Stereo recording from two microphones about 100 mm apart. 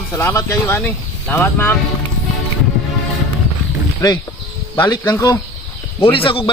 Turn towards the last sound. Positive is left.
turn(degrees=60)  # may be behind; listen again after turning